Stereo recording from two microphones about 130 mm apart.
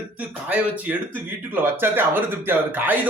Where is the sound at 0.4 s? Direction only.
10° right (ahead or behind).